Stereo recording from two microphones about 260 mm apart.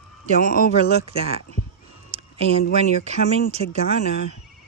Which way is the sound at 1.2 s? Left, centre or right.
Right.